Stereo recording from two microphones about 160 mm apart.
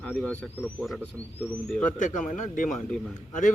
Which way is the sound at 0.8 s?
Centre (ahead or behind).